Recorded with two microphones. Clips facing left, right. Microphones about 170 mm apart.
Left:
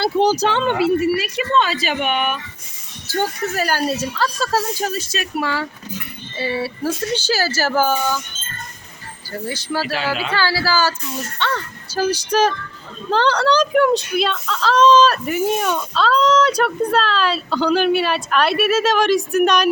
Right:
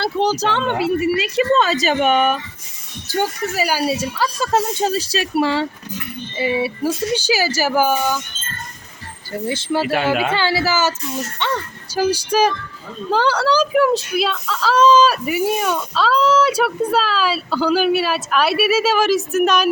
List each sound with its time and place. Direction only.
0.0 s speech: centre (ahead or behind)
1.1 s speech: 25° right (ahead or behind)
1.5 s speech: 40° right (ahead or behind)
3.1 s speech: 10° right (ahead or behind); by 5.6 s 25° right (ahead or behind)
6.3 s speech: 15° right (ahead or behind)
9.3 s speech: 25° right (ahead or behind)
9.8 s a child's voice: 55° right (ahead or behind)
10.3 s speech: 20° right (ahead or behind); by 19.6 s centre (ahead or behind)